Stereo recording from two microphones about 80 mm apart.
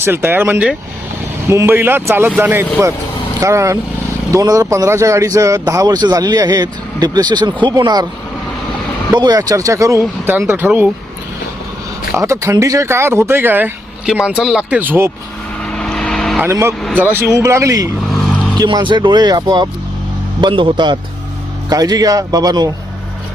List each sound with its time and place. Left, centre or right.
0.0 s speech: right
3.4 s a man's voice: right
9.1 s a man's voice: right
10.0 s speech: right
12.1 s speech: right
14.0 s speech: centre
14.7 s speech: right
15.6 s vehicle: centre
16.5 s speech: right
17.2 s a man's voice: right
18.5 s speech: right
20.4 s speech: right
21.7 s a man's voice: right